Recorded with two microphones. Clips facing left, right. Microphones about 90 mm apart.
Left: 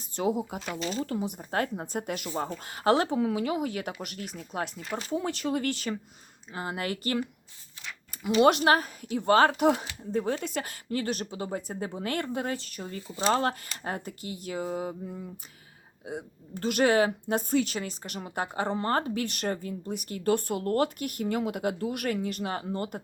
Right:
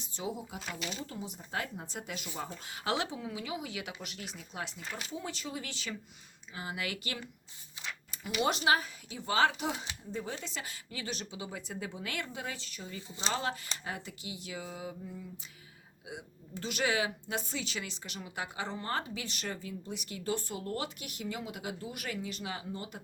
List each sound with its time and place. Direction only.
0.0 s speech: 60° left (ahead or behind)
0.8 s speech: 40° left (ahead or behind)
1.0 s a woman's voice: 65° left (ahead or behind)
2.6 s a woman's voice: 45° left (ahead or behind)
3.2 s a woman's voice: 55° left (ahead or behind)
8.1 s a sound: 50° left (ahead or behind)
8.4 s a woman's voice: 55° left (ahead or behind)